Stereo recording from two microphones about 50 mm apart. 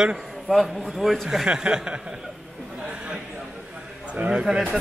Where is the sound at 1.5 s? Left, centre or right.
Centre.